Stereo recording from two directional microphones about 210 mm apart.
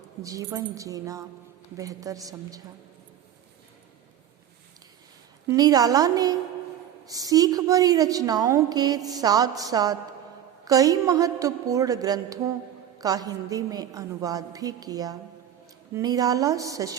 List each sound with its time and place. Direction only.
0.2 s a woman's voice: 15° right (ahead or behind)
5.5 s a woman's voice: 15° right (ahead or behind)